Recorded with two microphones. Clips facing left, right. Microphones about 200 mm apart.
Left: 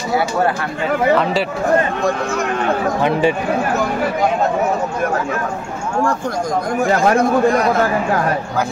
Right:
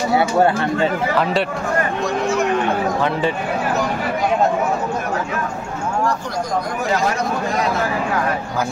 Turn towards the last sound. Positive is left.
turn(degrees=55)  # may be behind; listen again after turning